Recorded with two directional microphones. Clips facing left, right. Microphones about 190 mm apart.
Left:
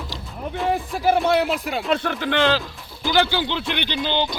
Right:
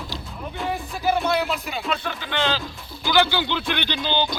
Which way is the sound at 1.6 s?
85° left.